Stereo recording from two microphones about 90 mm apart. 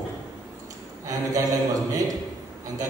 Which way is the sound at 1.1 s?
40° right (ahead or behind).